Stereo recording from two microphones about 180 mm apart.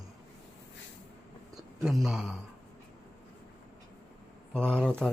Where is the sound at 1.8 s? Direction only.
Centre (ahead or behind).